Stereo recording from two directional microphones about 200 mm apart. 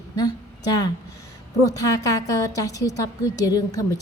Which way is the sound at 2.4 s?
15° left (ahead or behind).